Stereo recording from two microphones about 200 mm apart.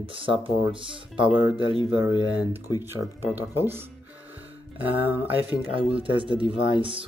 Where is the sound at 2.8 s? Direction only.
10° right (ahead or behind).